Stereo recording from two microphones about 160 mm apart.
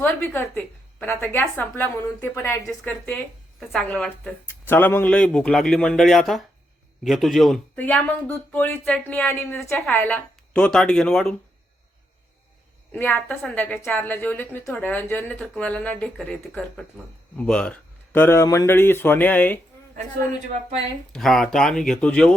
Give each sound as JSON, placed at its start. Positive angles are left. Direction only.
{"t": 0.0, "sound": "speech", "side_deg": 15}
{"t": 12.9, "sound": "speech", "side_deg": 10}
{"t": 20.5, "sound": "speech", "side_deg": -45}
{"t": 21.1, "sound": "speech", "side_deg": 0}